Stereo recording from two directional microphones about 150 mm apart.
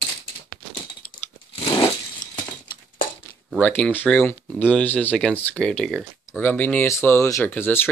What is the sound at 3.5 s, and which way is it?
Speech, 10° left (ahead or behind).